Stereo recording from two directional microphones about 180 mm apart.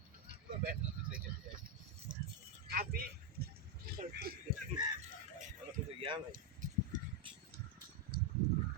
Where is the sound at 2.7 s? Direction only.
60° right (ahead or behind).